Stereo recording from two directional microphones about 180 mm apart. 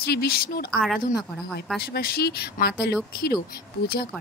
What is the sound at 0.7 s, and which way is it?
Speech, centre (ahead or behind).